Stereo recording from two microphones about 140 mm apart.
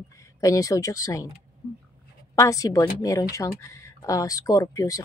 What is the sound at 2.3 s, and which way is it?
Speech, 25° left (ahead or behind).